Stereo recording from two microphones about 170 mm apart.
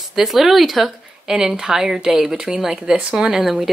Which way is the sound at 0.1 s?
Centre (ahead or behind).